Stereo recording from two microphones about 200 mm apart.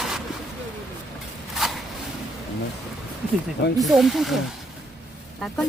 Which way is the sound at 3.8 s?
Centre (ahead or behind).